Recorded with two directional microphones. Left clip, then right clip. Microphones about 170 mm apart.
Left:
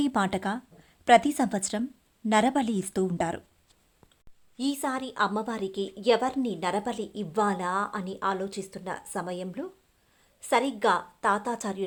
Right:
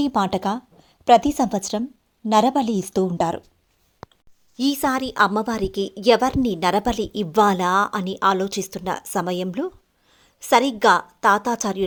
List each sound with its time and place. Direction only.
0.0 s a woman's voice: 15° right (ahead or behind)
4.5 s a woman's voice: 40° right (ahead or behind)